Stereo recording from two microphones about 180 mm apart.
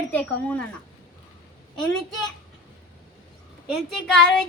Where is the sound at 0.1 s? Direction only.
10° left (ahead or behind).